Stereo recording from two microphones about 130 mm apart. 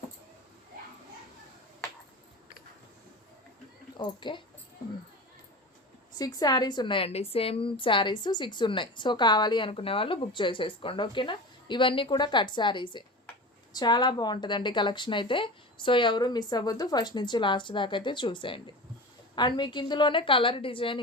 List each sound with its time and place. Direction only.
3.9 s speech: 35° left (ahead or behind)
6.1 s a woman's voice: 30° left (ahead or behind)